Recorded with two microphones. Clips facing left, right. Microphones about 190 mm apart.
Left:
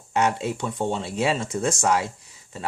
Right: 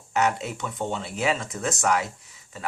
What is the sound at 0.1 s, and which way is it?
Speech, 30° left (ahead or behind).